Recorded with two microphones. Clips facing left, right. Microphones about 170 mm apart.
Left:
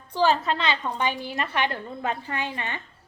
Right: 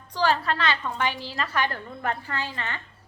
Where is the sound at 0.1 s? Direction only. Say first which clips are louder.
Left 2 dB; 20° left (ahead or behind).